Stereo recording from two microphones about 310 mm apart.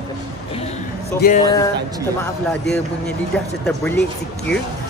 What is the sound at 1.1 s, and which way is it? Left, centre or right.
Speech, left.